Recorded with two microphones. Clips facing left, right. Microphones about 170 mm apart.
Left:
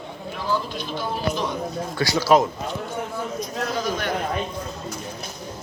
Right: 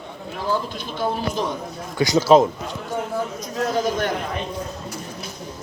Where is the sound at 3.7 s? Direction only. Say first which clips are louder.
Right 6 dB; 45° right (ahead or behind).